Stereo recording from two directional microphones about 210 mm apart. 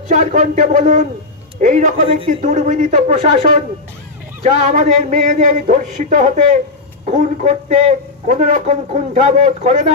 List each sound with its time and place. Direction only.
0.1 s a man's voice: 35° right (ahead or behind)